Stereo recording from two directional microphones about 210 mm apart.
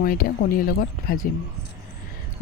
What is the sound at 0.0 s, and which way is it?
Speech, 40° left (ahead or behind).